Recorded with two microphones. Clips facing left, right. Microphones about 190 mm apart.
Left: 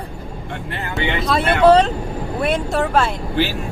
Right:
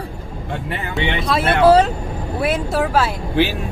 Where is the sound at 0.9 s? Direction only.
Centre (ahead or behind).